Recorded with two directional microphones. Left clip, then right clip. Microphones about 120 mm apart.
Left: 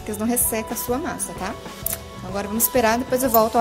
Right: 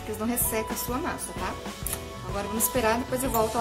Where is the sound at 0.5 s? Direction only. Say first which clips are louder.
Left 5 dB; 50° left (ahead or behind).